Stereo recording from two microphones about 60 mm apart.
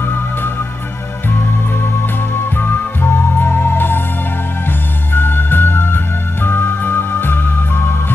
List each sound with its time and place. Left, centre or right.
0.0 s music: left
2.3 s music: left
5.1 s music: left